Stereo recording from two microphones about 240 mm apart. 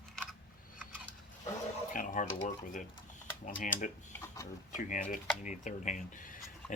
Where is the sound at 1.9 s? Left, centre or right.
Left.